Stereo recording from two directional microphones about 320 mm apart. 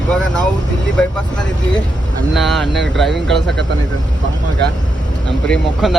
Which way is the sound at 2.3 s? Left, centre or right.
Centre.